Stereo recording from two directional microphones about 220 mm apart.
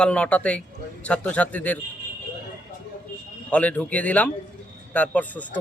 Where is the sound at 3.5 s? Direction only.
5° left (ahead or behind).